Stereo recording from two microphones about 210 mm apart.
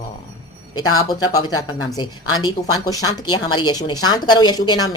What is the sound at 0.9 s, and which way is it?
A woman's voice, 15° left (ahead or behind).